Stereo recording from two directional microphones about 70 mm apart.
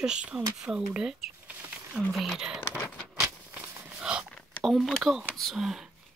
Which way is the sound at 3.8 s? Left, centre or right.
Centre.